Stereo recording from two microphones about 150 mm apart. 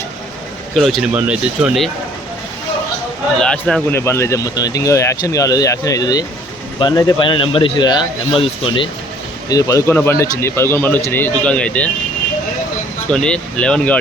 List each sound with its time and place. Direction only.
0.8 s speech: centre (ahead or behind)
3.4 s speech: 5° left (ahead or behind)
3.9 s speech: 20° left (ahead or behind); by 8.9 s 35° left (ahead or behind)
9.5 s a man's voice: 25° left (ahead or behind); by 11.9 s 10° left (ahead or behind)
13.1 s a man's voice: 5° left (ahead or behind)